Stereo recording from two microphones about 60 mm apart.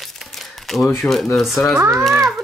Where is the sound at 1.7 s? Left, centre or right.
Right.